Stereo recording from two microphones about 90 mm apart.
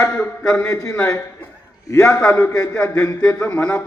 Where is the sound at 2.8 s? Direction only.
15° left (ahead or behind).